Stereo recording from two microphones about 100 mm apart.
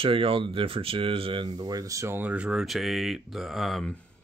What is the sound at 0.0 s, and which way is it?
Speech, 65° right (ahead or behind).